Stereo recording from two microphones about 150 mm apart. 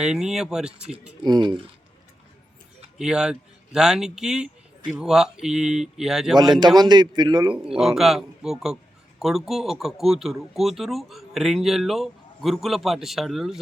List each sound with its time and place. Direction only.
0.0 s a man's voice: 5° right (ahead or behind)
1.2 s speech: 30° right (ahead or behind)
3.0 s a man's voice: 5° right (ahead or behind)
6.3 s a man's voice: 30° right (ahead or behind)
7.5 s a man's voice: 5° right (ahead or behind)